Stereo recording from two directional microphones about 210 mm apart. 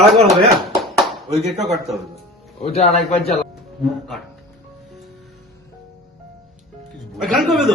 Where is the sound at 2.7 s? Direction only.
30° left (ahead or behind).